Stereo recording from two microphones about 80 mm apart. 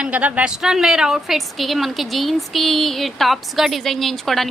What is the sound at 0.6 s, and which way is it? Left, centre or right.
A woman's voice, centre.